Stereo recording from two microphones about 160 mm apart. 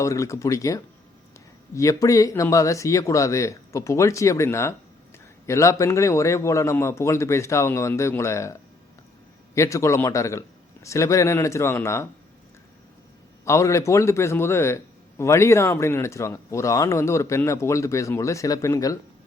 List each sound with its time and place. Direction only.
0.0 s speech: 20° left (ahead or behind)
9.6 s speech: 20° left (ahead or behind)
13.4 s speech: 20° left (ahead or behind)